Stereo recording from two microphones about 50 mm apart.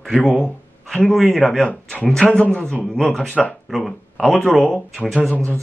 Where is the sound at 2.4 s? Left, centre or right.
Left.